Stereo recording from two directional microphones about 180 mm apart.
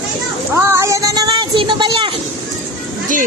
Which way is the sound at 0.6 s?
15° right (ahead or behind).